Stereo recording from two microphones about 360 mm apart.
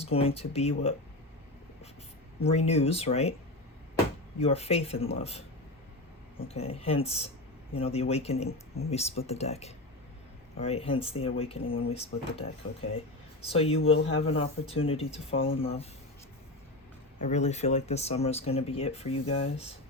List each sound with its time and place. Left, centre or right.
0.0 s speech: centre
2.4 s speech: centre
4.4 s speech: centre
17.2 s speech: centre